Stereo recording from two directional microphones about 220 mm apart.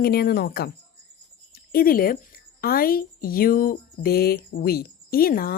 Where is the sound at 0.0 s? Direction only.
45° left (ahead or behind).